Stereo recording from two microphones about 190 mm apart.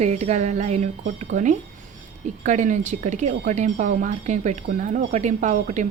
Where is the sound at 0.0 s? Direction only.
35° right (ahead or behind).